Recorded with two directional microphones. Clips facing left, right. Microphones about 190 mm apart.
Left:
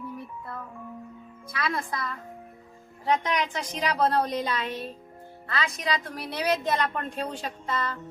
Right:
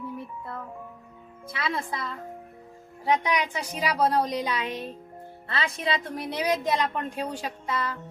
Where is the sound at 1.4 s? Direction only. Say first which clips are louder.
Even; 25° right (ahead or behind).